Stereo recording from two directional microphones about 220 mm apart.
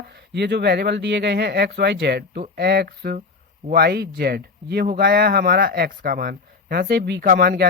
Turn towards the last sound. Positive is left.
turn(degrees=-45)  # may be behind; listen again after turning